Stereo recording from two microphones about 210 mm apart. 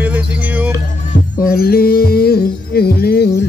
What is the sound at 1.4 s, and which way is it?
Music, 45° left (ahead or behind).